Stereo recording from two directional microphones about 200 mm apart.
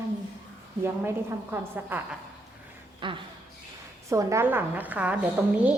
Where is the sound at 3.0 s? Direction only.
25° right (ahead or behind); by 5.8 s 5° right (ahead or behind).